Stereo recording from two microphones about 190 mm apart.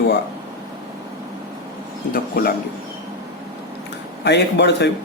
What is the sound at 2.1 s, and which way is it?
Speech, 50° left (ahead or behind).